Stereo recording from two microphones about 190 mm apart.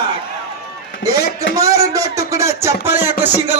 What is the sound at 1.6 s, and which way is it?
A man's voice, 15° right (ahead or behind).